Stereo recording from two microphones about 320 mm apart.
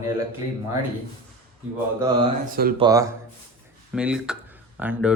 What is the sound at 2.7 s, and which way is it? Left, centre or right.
A man's voice, centre.